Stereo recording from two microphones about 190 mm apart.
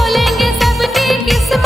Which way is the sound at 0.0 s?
Centre (ahead or behind).